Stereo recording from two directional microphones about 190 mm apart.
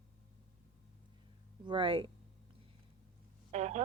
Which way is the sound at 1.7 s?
25° right (ahead or behind).